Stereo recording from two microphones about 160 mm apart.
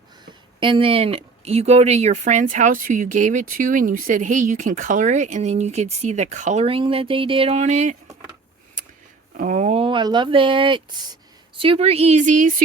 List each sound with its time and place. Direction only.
0.6 s speech: 35° right (ahead or behind)
9.4 s speech: 50° right (ahead or behind)